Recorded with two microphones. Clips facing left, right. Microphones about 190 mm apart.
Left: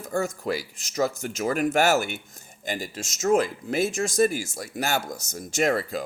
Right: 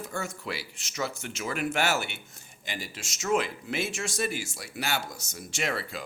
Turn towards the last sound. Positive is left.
turn(degrees=45)  # may be behind; listen again after turning